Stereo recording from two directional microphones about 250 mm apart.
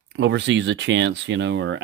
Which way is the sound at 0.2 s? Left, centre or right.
Right.